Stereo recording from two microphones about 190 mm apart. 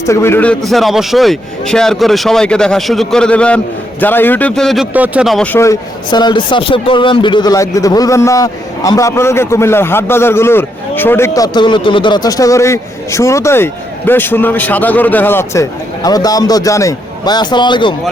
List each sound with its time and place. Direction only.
0.1 s a man's voice: 15° left (ahead or behind)